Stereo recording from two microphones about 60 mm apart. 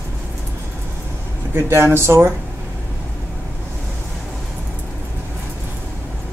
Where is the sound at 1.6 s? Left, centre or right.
Right.